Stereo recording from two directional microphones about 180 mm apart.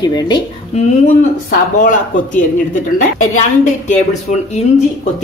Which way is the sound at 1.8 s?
45° left (ahead or behind).